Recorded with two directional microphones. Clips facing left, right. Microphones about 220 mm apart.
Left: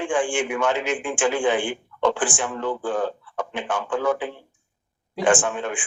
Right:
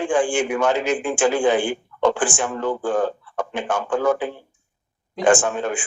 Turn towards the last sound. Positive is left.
turn(degrees=-40)  # may be behind; listen again after turning